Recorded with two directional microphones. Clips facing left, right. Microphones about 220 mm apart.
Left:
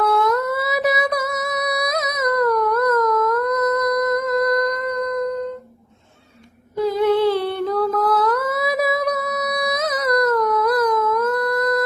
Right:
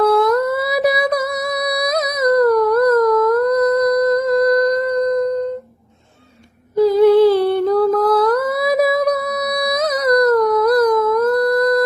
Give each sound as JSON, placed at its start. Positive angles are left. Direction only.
{"t": 0.0, "sound": "humming", "side_deg": -35}
{"t": 6.7, "sound": "humming", "side_deg": -35}